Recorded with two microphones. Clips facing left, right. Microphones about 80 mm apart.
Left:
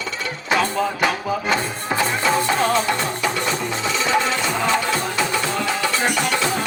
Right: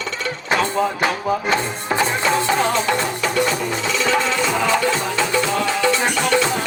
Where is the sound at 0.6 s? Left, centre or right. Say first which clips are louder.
Right 1 dB; centre.